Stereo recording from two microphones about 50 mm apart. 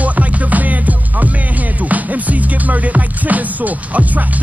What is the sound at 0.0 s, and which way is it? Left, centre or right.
Music, right.